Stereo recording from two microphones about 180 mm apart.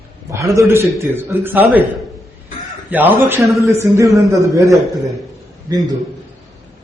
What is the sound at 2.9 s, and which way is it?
Speech, 10° right (ahead or behind).